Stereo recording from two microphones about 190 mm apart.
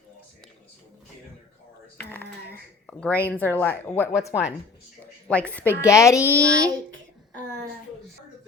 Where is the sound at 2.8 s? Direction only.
5° left (ahead or behind).